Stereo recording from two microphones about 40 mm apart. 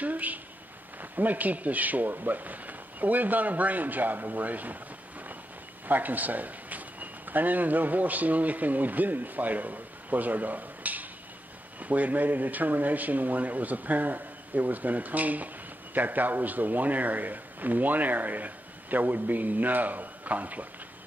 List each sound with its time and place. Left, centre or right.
0.0 s a sound: right
1.1 s speech: right
5.9 s speech: right